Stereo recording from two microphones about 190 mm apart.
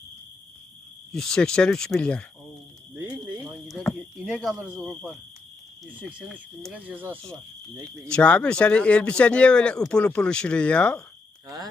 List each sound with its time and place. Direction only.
1.1 s speech: 5° left (ahead or behind)
2.9 s a sound: 10° right (ahead or behind)
5.8 s speech: 5° right (ahead or behind)
8.1 s speech: 5° left (ahead or behind)
11.4 s cricket: 20° right (ahead or behind)